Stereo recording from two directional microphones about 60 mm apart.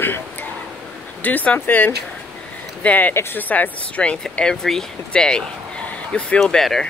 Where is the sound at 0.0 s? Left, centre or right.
Left.